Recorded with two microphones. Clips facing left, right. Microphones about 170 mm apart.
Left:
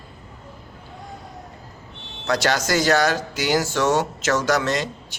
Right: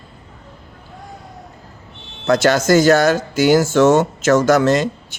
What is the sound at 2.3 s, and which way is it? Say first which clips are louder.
Speech: right 8 dB; 50° right (ahead or behind).